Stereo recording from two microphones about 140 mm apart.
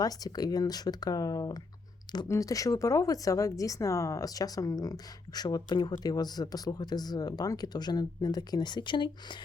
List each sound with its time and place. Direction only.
0.0 s speech: 25° left (ahead or behind)